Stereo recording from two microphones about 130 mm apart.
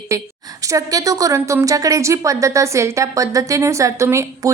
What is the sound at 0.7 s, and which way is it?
A woman's voice, 25° right (ahead or behind).